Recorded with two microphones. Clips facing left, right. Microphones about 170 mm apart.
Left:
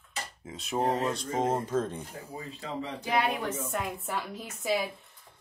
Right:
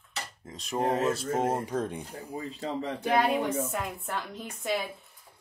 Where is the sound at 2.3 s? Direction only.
35° right (ahead or behind).